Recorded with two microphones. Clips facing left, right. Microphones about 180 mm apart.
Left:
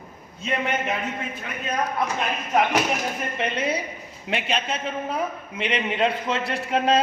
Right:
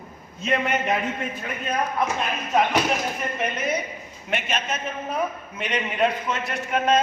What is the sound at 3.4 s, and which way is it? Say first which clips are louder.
A man's voice: left 1 dB; 30° left (ahead or behind).